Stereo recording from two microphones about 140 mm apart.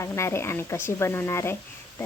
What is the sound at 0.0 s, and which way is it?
Speech, 20° left (ahead or behind).